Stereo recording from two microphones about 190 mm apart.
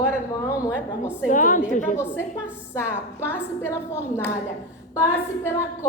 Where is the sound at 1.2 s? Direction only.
45° left (ahead or behind).